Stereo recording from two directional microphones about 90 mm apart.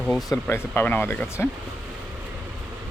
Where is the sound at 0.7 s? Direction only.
20° left (ahead or behind).